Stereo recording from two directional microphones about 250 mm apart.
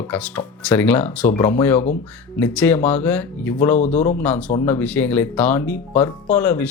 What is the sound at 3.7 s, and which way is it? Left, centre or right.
Speech, left.